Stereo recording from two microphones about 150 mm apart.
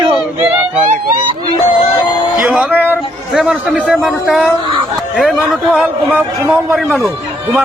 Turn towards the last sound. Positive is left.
turn(degrees=-15)  # may be behind; listen again after turning